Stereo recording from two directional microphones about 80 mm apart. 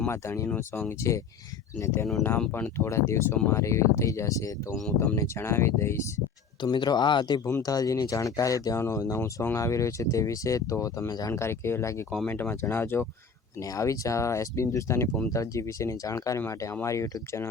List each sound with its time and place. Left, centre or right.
0.1 s speech: left
6.6 s speech: left
7.6 s speech: left
11.3 s speech: left
13.6 s speech: left